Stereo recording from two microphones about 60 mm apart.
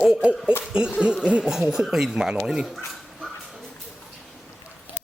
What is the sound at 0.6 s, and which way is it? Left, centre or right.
Speech, centre.